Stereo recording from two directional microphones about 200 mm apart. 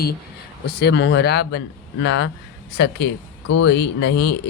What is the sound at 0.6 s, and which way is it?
Speech, 55° left (ahead or behind).